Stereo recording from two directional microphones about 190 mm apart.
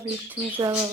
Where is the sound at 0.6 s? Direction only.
20° right (ahead or behind).